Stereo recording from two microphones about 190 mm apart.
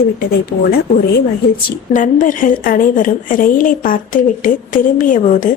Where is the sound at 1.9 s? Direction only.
40° left (ahead or behind).